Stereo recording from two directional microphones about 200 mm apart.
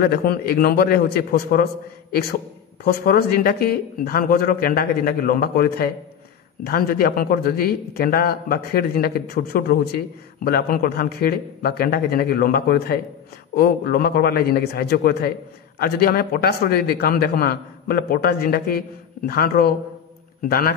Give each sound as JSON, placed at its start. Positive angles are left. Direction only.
{"t": 0.0, "sound": "a man's voice", "side_deg": 50}
{"t": 2.8, "sound": "a man's voice", "side_deg": 50}